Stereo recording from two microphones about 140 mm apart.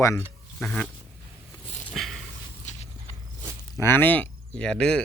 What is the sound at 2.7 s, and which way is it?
Walk, 60° left (ahead or behind).